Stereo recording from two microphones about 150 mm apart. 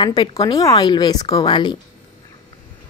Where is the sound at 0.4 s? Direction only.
25° left (ahead or behind).